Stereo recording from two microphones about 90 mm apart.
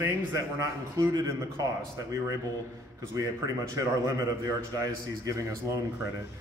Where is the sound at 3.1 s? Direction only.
35° right (ahead or behind).